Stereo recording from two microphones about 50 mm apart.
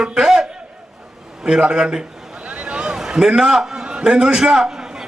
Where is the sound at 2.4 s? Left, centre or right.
Right.